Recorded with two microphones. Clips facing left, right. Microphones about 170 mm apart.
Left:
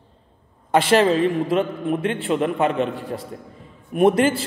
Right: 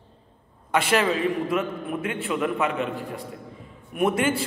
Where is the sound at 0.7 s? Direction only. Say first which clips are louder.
Left 6 dB; 30° left (ahead or behind).